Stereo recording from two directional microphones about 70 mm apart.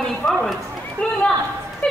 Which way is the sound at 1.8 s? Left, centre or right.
Centre.